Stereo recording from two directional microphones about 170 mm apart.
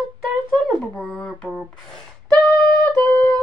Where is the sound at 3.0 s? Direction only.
10° left (ahead or behind).